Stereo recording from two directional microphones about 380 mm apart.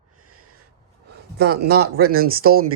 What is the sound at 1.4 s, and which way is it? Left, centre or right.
Speech, right.